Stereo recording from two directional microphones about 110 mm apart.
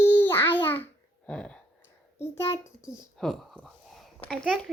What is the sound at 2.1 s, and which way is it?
Speech, 25° left (ahead or behind).